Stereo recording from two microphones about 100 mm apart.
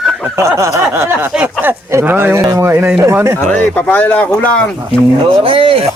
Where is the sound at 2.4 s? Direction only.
40° right (ahead or behind).